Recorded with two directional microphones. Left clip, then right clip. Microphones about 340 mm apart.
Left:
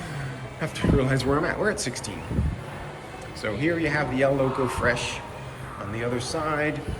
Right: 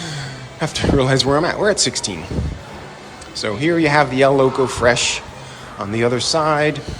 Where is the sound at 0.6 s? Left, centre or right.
Centre.